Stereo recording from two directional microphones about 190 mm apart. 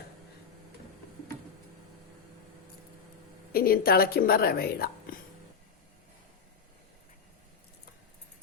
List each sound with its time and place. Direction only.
3.5 s a woman's voice: 50° left (ahead or behind)